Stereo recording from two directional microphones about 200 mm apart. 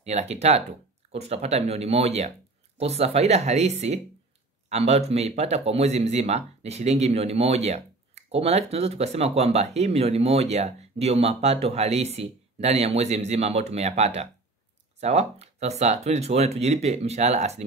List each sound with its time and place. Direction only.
0.0 s speech: 35° right (ahead or behind)